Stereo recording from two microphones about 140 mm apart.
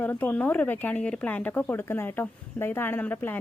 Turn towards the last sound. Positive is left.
turn(degrees=15)  # may be behind; listen again after turning